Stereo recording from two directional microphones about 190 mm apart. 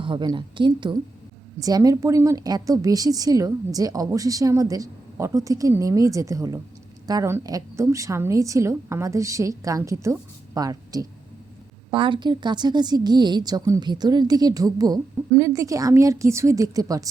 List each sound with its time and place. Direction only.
0.0 s a woman's voice: 25° right (ahead or behind)